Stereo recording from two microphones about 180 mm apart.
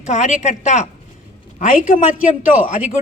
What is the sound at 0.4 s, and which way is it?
Speech, 40° left (ahead or behind).